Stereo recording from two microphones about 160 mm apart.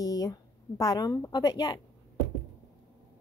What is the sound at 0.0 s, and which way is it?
A woman's voice, 20° left (ahead or behind).